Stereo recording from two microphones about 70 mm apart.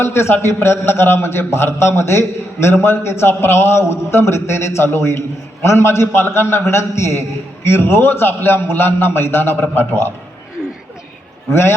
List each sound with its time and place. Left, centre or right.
0.0 s a man's voice: left